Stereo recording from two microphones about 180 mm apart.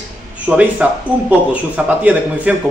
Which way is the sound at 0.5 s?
10° right (ahead or behind).